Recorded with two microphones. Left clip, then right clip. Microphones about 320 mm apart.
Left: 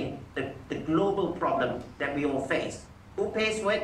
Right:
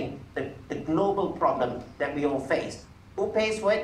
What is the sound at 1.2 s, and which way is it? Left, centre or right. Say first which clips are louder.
Speech: right 2 dB; centre.